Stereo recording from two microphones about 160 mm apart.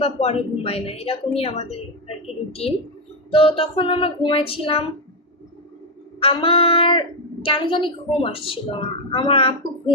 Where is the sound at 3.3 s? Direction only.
35° left (ahead or behind).